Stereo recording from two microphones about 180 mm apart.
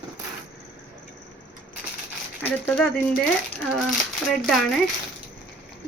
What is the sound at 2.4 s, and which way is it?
Speech, 10° left (ahead or behind).